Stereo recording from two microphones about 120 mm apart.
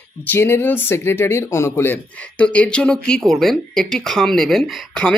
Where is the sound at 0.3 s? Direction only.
20° left (ahead or behind).